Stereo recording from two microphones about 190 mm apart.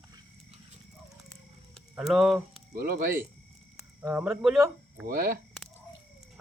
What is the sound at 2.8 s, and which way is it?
Speech, 50° right (ahead or behind).